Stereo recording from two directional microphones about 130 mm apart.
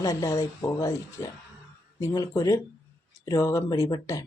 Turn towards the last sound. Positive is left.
turn(degrees=25)  # may be behind; listen again after turning